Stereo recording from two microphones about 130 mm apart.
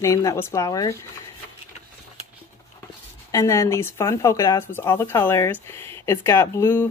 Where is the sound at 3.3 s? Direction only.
25° left (ahead or behind).